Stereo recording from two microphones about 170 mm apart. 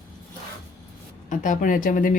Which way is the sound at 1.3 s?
50° left (ahead or behind).